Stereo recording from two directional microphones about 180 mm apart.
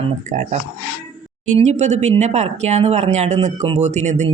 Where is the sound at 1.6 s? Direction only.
40° right (ahead or behind).